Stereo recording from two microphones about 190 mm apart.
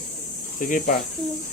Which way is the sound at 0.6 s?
45° left (ahead or behind).